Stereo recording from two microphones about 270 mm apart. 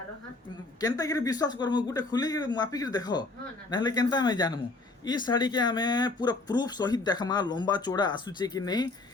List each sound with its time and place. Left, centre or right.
0.8 s speech: centre